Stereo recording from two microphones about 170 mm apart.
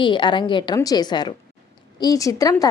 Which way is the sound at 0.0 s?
30° left (ahead or behind).